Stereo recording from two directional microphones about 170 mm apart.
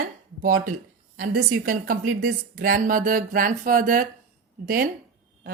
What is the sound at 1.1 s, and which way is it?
A woman's voice, 55° right (ahead or behind).